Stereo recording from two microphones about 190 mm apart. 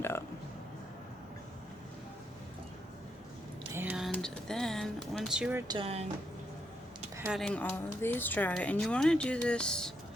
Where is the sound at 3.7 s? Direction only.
5° right (ahead or behind).